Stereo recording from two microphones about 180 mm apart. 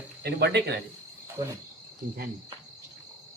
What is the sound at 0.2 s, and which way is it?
Speech, 65° right (ahead or behind).